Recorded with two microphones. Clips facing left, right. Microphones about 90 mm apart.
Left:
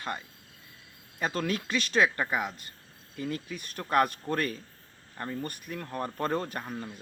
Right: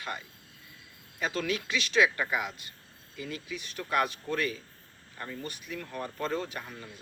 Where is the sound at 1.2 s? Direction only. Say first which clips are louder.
Left 1 dB; 40° left (ahead or behind).